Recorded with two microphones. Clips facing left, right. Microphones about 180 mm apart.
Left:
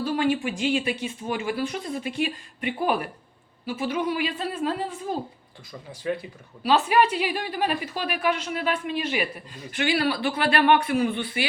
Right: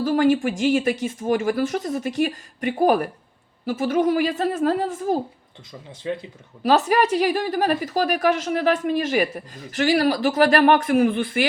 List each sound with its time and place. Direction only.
0.0 s a woman's voice: 45° right (ahead or behind)
6.0 s speech: 25° right (ahead or behind)
6.6 s a woman's voice: 45° right (ahead or behind)